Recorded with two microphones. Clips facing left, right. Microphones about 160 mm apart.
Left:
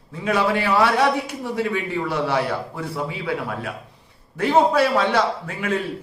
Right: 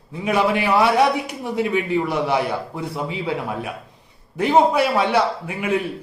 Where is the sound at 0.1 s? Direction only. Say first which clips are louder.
Right 1 dB; 15° right (ahead or behind).